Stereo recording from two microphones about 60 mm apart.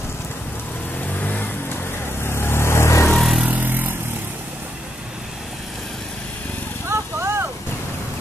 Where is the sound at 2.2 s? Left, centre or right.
Left.